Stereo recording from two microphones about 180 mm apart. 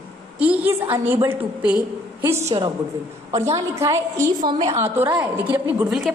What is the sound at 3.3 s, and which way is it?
A woman's voice, 15° right (ahead or behind).